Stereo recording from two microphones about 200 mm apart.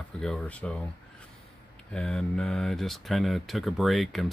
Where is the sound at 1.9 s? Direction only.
5° left (ahead or behind).